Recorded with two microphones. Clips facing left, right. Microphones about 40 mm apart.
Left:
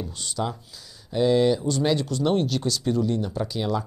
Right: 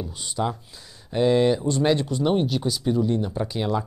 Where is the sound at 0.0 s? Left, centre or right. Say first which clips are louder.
Right 2 dB; centre.